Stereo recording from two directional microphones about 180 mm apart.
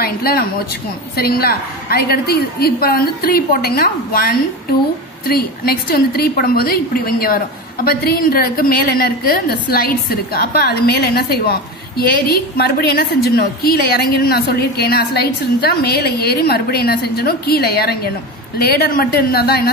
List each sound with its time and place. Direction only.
0.0 s a woman's voice: 55° left (ahead or behind)